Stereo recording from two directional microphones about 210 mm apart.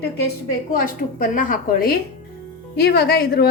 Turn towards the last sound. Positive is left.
turn(degrees=45)  # may be behind; listen again after turning